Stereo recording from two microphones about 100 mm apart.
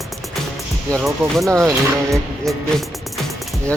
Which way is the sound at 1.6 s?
30° right (ahead or behind).